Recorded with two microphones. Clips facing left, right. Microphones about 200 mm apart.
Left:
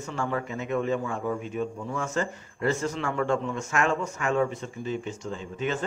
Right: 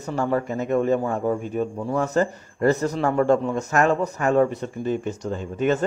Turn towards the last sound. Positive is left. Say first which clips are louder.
# right 8 dB
turn(degrees=-45)  # may be behind; listen again after turning